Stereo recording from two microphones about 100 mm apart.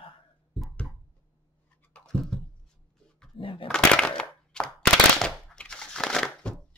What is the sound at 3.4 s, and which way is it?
Speech, 60° left (ahead or behind).